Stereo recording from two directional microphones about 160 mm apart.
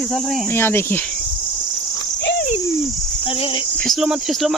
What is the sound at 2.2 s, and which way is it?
Cricket, 90° left.